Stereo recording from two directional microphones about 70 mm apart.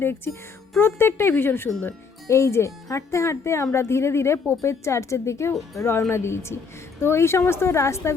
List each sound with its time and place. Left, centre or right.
0.8 s a woman's voice: left